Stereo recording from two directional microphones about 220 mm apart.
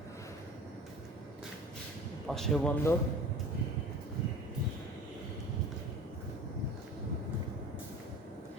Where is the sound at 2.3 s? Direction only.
5° left (ahead or behind).